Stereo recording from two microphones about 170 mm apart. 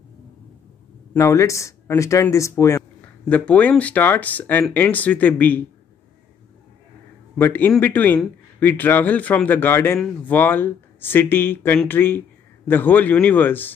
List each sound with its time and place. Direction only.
1.1 s a man's voice: 15° left (ahead or behind)
7.3 s a man's voice: 10° left (ahead or behind)